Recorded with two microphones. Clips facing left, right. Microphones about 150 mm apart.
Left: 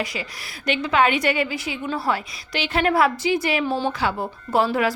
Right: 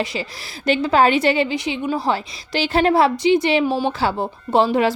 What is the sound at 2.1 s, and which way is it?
A woman's voice, 30° right (ahead or behind).